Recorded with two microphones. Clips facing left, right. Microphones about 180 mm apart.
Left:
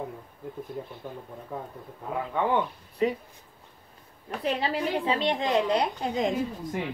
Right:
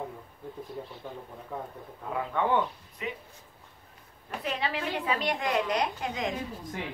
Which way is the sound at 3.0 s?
35° left (ahead or behind).